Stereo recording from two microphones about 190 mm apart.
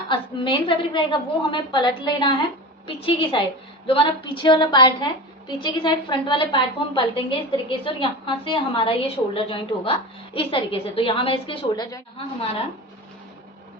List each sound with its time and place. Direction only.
0.1 s a woman's voice: 25° left (ahead or behind)